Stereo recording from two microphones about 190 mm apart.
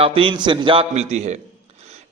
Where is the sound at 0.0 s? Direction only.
30° right (ahead or behind).